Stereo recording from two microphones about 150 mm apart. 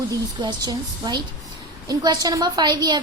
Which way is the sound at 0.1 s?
30° right (ahead or behind).